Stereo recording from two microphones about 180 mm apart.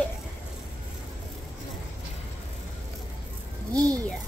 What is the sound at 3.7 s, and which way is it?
Speech, 20° right (ahead or behind).